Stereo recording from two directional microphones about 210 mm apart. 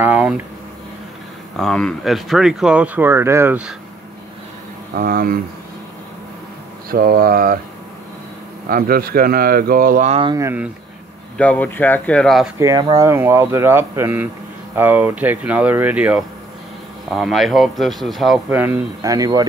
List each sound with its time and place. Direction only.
0.0 s speech: 10° right (ahead or behind)
1.6 s speech: 5° left (ahead or behind)
4.9 s speech: 45° right (ahead or behind)
6.9 s speech: 45° right (ahead or behind)
8.6 s speech: 45° right (ahead or behind)
10.3 s speech: 10° right (ahead or behind)
11.3 s speech: 5° left (ahead or behind)
12.5 s speech: 20° right (ahead or behind)